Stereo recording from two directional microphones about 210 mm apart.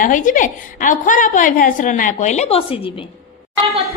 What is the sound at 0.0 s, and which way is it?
A woman's voice, 40° left (ahead or behind).